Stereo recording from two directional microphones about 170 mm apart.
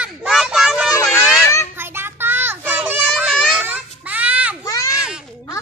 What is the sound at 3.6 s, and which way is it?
Baby cry, 10° right (ahead or behind).